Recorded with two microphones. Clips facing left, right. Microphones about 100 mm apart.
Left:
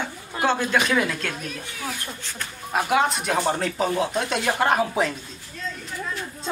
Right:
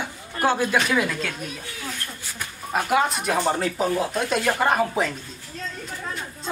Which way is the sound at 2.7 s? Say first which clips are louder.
Even; centre (ahead or behind).